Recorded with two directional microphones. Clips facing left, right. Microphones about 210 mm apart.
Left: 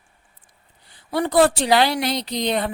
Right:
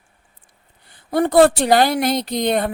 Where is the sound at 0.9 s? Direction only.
50° right (ahead or behind).